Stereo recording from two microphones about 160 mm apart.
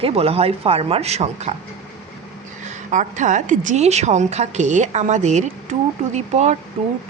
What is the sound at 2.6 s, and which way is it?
A woman's voice, 50° right (ahead or behind).